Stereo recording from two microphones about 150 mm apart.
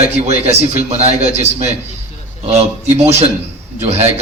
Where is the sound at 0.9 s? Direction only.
45° right (ahead or behind).